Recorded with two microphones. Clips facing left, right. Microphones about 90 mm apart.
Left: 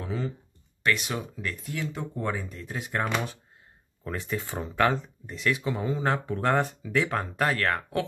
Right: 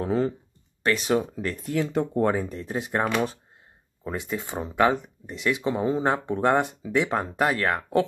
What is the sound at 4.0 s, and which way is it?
Speech, 15° right (ahead or behind).